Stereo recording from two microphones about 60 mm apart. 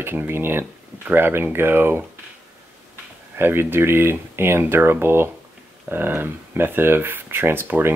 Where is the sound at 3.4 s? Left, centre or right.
Right.